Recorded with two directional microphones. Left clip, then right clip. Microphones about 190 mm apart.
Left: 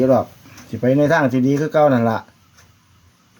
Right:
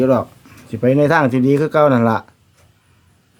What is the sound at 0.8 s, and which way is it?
Speech, 20° right (ahead or behind).